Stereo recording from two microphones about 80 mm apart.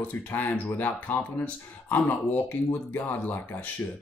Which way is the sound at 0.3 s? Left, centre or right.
Left.